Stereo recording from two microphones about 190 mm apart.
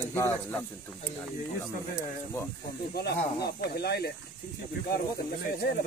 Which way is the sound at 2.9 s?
55° left (ahead or behind).